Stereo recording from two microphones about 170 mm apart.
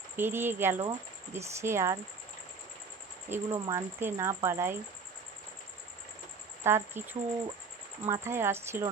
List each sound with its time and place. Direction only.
0.2 s speech: 15° right (ahead or behind)
3.2 s speech: 15° right (ahead or behind)
6.6 s speech: 15° right (ahead or behind)